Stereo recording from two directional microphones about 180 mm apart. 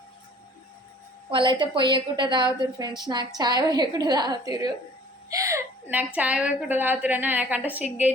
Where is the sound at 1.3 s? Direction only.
25° right (ahead or behind).